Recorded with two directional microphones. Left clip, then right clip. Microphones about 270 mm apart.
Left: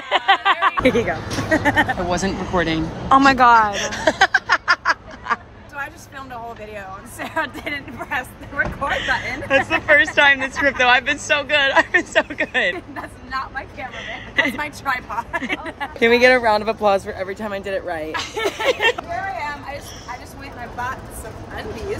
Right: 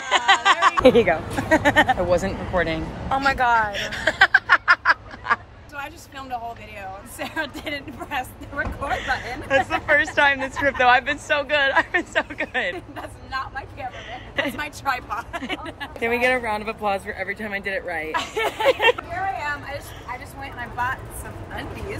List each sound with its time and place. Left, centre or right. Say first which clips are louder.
0.1 s a sound: left 1 dB; centre
0.8 s speech: right 3 dB; centre
2.0 s speech: even; centre
3.1 s a woman's voice: left 7 dB; left
3.7 s a sound: left 4 dB; centre
7.2 s speech: left 4 dB; centre
16.0 s speech: left 8 dB; left
18.6 s speech: right 1 dB; centre